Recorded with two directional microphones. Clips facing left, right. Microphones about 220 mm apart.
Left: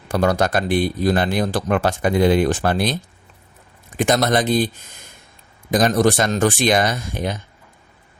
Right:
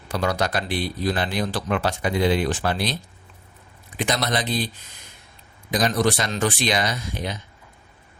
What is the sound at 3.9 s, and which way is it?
Speech, 50° left (ahead or behind).